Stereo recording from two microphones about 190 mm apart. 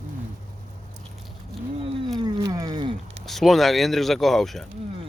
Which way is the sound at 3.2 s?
Centre (ahead or behind).